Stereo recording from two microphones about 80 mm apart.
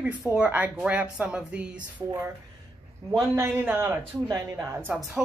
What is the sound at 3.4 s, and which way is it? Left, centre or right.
A woman's voice, right.